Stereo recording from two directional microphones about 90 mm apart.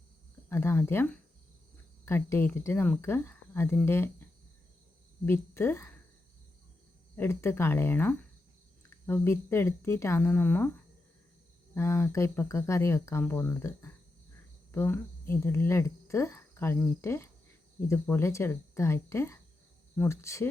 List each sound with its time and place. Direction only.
0.5 s a woman's voice: 25° left (ahead or behind)
7.2 s speech: 25° left (ahead or behind)
11.7 s speech: 30° left (ahead or behind)